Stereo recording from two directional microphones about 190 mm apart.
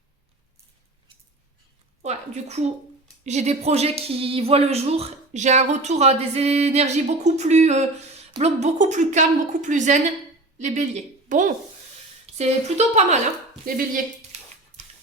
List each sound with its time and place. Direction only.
2.0 s a woman's voice: 35° right (ahead or behind)
13.7 s speech: 45° right (ahead or behind)